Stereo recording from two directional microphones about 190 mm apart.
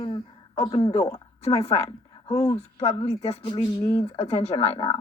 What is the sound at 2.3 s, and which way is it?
Speech, 20° left (ahead or behind).